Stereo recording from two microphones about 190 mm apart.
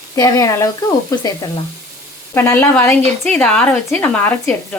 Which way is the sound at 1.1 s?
20° left (ahead or behind).